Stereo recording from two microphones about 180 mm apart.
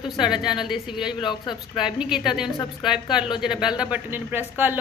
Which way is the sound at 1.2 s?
25° left (ahead or behind).